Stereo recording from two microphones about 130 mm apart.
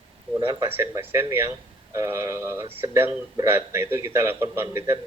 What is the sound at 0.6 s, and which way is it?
Speech, 20° right (ahead or behind).